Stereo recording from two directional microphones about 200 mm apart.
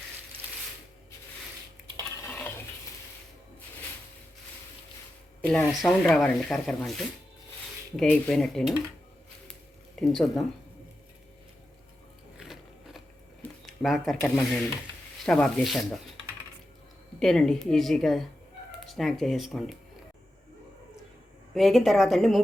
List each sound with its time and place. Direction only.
2.2 s stir: 10° left (ahead or behind)
5.4 s speech: 5° left (ahead or behind)
9.5 s a sound: centre (ahead or behind)
12.4 s biting: centre (ahead or behind)
13.4 s camera: centre (ahead or behind)
14.3 s speech: 5° left (ahead or behind)
17.2 s speech: centre (ahead or behind)
21.5 s speech: centre (ahead or behind)